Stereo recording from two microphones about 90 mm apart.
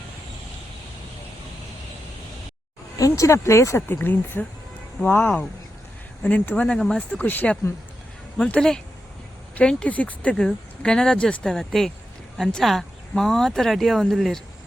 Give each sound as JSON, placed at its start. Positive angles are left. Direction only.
{"t": 3.0, "sound": "speech", "side_deg": 35}
{"t": 6.7, "sound": "speech", "side_deg": 5}
{"t": 7.1, "sound": "speech", "side_deg": 20}